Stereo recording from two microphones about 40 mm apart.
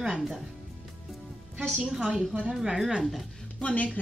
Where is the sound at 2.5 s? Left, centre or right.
Centre.